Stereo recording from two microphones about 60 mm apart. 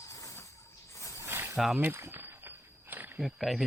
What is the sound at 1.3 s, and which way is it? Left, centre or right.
Snake, right.